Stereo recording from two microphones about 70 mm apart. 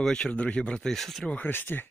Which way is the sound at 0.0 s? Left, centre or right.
Centre.